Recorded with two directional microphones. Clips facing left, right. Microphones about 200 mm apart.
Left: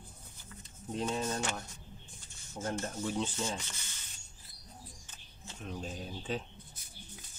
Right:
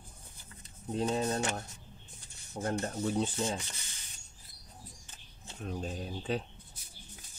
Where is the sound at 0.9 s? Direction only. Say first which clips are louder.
Right 3 dB; 35° right (ahead or behind).